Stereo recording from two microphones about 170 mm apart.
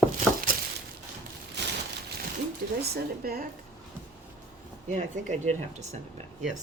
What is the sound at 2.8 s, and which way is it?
Speech, 65° right (ahead or behind).